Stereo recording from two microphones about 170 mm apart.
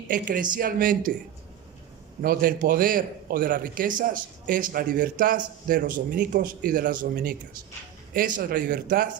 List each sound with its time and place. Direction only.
0.1 s a man's voice: 55° right (ahead or behind)
2.2 s a man's voice: 60° right (ahead or behind)